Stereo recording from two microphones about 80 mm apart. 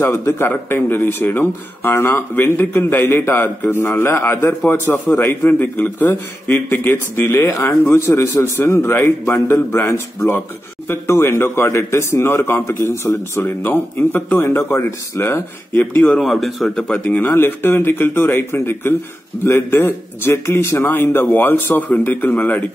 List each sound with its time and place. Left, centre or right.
0.0 s a man's voice: left
8.7 s a man's voice: left
16.2 s speech: centre